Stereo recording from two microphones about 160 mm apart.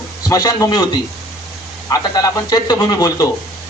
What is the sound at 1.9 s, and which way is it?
Speech, 25° left (ahead or behind).